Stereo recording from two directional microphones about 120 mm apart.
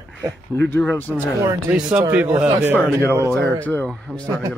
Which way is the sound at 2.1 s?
10° right (ahead or behind).